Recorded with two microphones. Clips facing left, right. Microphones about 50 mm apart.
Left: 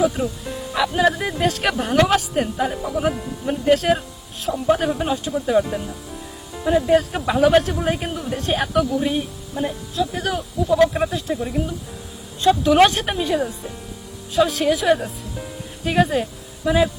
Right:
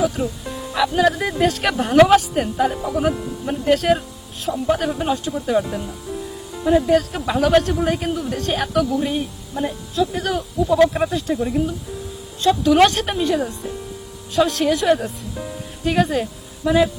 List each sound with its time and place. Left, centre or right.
0.0 s a woman's voice: centre
6.9 s speech: centre
7.3 s a woman's voice: centre